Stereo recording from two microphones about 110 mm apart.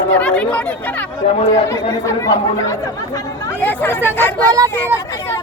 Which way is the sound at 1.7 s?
30° left (ahead or behind).